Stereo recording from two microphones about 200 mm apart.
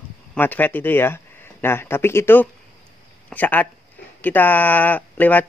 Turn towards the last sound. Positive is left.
turn(degrees=10)  # may be behind; listen again after turning